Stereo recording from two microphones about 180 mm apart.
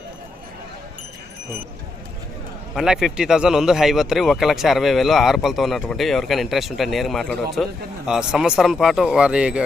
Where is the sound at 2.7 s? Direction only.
5° right (ahead or behind).